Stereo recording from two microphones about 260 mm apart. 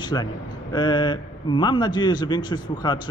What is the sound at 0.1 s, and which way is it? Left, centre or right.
A man's voice, centre.